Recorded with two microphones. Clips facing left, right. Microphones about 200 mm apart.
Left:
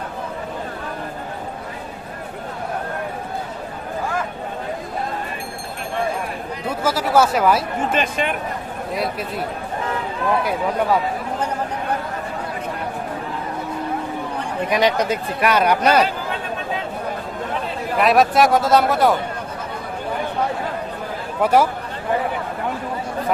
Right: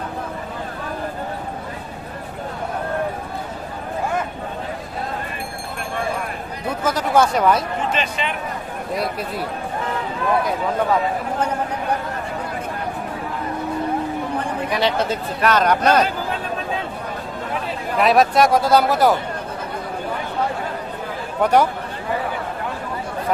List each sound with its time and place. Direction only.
6.8 s speech: 5° left (ahead or behind)
7.9 s a man's voice: 50° left (ahead or behind)
8.9 s speech: centre (ahead or behind)
14.7 s speech: 15° left (ahead or behind)
17.9 s speech: centre (ahead or behind)
21.4 s speech: 5° left (ahead or behind)